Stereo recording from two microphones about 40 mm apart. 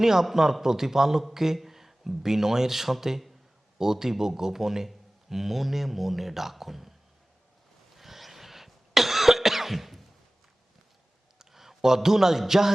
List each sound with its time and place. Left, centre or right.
0.0 s speech: centre
7.9 s cough: centre
11.3 s a man's voice: centre